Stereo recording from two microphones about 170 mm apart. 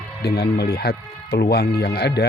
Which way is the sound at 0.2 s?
70° left (ahead or behind).